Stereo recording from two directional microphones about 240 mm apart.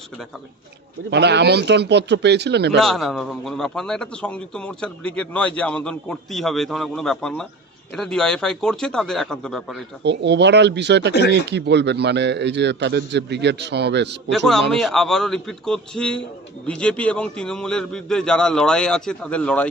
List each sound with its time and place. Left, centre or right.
1.1 s a man's voice: right
2.7 s a man's voice: centre
10.0 s a man's voice: right
14.3 s a man's voice: centre